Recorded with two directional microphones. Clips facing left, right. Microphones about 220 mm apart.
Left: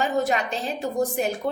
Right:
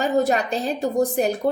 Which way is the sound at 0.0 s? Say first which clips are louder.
Right 4 dB; 40° right (ahead or behind).